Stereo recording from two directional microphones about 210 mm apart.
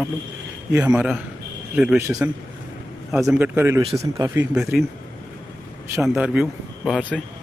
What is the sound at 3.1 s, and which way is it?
Speech, centre (ahead or behind).